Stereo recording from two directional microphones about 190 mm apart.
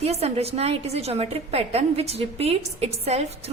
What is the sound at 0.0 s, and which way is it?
A woman's voice, 35° right (ahead or behind).